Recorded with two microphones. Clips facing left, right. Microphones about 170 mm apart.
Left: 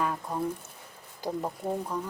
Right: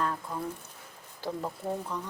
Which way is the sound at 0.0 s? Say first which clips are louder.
Left 3 dB; 15° left (ahead or behind).